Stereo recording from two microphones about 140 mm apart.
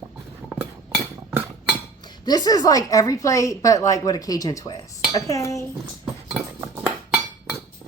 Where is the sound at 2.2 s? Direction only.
30° left (ahead or behind).